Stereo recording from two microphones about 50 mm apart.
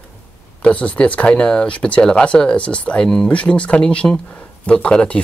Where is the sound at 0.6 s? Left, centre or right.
Left.